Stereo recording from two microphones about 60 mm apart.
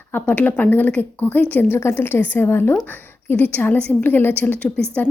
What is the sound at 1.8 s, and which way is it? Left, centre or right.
A woman's voice, left.